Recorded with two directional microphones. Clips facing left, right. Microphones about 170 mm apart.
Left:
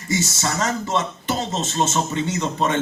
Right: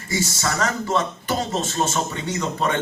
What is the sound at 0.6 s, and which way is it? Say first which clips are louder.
Speech: right 1 dB; 25° left (ahead or behind).